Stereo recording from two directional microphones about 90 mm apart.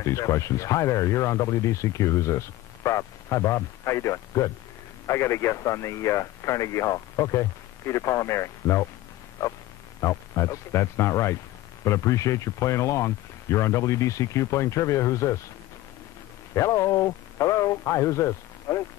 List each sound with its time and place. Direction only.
0.0 s speech: 35° left (ahead or behind)
16.5 s speech: 35° left (ahead or behind)